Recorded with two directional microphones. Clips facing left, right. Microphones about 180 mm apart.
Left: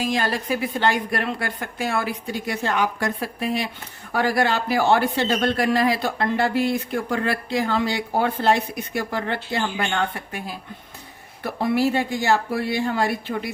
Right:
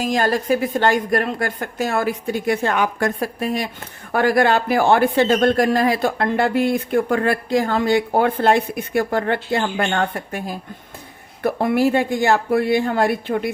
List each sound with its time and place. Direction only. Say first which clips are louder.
0.0 s a man's voice: right 4 dB; 45° right (ahead or behind)